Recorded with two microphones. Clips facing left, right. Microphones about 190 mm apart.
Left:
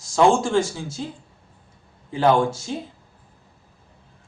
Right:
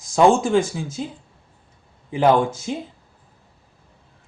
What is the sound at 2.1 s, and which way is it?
Speech, 15° right (ahead or behind).